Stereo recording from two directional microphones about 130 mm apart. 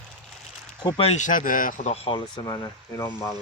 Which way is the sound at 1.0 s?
60° left (ahead or behind).